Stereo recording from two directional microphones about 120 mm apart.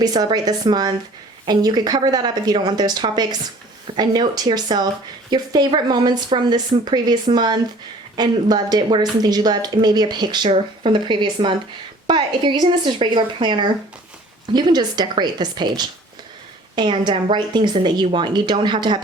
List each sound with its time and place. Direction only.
0.0 s speech: 35° right (ahead or behind)